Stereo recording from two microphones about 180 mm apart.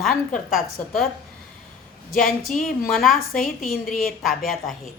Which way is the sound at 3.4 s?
50° left (ahead or behind).